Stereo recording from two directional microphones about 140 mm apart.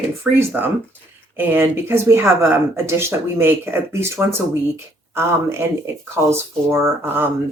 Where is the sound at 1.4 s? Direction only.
15° right (ahead or behind).